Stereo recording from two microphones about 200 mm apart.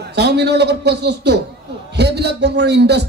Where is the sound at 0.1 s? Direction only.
55° right (ahead or behind).